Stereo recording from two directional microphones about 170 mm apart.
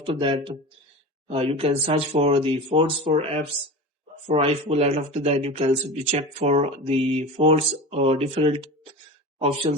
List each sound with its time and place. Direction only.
0.0 s speech: 30° right (ahead or behind)